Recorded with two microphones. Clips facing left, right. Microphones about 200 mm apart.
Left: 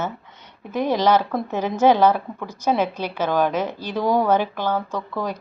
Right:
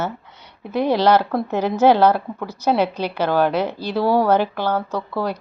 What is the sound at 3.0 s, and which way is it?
Speech, 10° right (ahead or behind).